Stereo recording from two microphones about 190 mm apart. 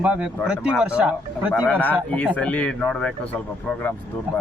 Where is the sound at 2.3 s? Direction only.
5° left (ahead or behind).